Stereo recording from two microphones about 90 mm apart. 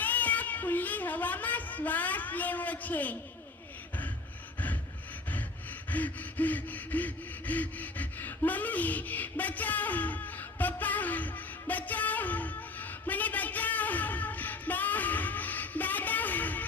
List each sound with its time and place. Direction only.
0.0 s speech: 20° left (ahead or behind)
5.9 s gasp: 20° left (ahead or behind)